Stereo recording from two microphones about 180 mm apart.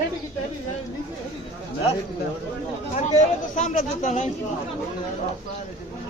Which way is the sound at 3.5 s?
40° left (ahead or behind).